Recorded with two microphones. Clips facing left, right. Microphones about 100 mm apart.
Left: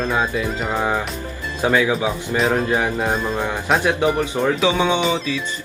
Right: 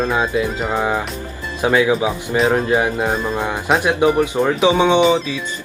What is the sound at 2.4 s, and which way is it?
Speech, centre (ahead or behind).